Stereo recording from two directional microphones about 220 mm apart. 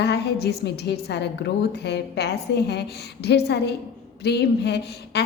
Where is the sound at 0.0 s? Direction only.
50° left (ahead or behind).